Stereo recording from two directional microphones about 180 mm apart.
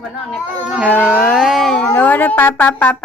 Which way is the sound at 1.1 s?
Centre (ahead or behind).